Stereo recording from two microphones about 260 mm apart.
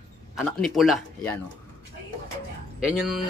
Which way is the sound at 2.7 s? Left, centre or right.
Centre.